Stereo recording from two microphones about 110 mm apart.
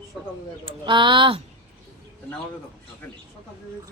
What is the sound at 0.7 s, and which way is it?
Speech, 50° right (ahead or behind).